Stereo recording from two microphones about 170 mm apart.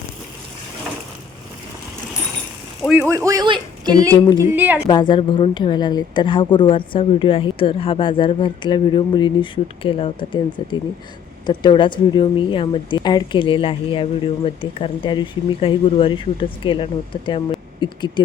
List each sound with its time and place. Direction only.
2.8 s speech: 10° right (ahead or behind)
4.4 s a woman's voice: 10° right (ahead or behind)
4.9 s a woman's voice: 25° left (ahead or behind)